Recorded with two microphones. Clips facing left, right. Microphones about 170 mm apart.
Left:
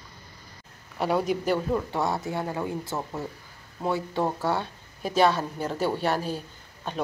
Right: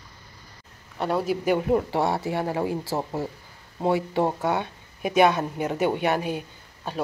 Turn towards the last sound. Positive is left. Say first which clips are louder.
# right 1 dB
turn(degrees=-10)  # may be behind; listen again after turning